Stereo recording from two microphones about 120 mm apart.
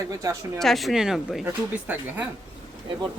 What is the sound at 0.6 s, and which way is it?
Speech, centre (ahead or behind).